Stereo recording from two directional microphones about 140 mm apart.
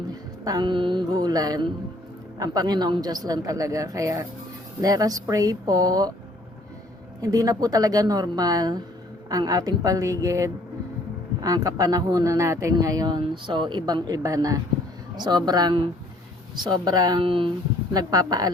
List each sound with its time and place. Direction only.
0.1 s mantra: 30° right (ahead or behind)
2.4 s a woman's voice: 25° right (ahead or behind)
7.2 s a woman's voice: 25° right (ahead or behind)
17.9 s a woman's voice: 25° right (ahead or behind)